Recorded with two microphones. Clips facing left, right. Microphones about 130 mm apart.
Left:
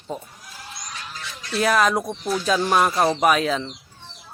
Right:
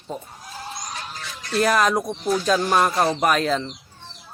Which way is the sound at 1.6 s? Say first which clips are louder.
Even; centre (ahead or behind).